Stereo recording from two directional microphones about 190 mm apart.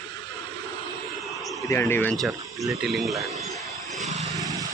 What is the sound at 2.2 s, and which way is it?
Speech, centre (ahead or behind).